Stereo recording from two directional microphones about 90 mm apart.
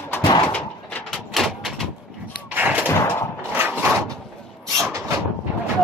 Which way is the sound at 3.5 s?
20° right (ahead or behind).